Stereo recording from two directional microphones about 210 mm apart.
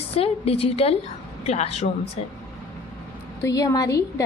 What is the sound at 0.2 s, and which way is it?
A woman's voice, 25° left (ahead or behind).